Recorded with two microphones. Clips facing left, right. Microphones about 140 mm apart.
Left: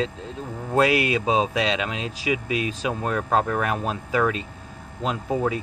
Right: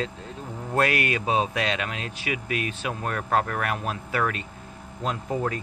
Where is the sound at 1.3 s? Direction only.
20° left (ahead or behind).